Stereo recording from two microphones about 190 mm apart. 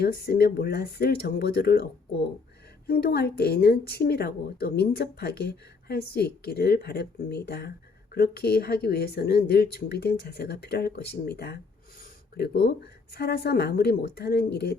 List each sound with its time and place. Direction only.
0.0 s speech: 55° left (ahead or behind)